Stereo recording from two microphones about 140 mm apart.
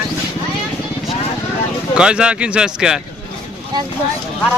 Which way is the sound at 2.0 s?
5° right (ahead or behind).